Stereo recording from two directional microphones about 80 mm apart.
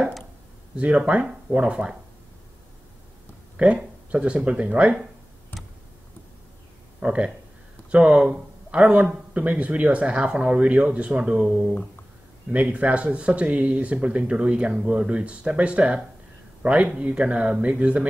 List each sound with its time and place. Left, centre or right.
0.7 s speech: centre
3.5 s speech: centre
7.0 s speech: centre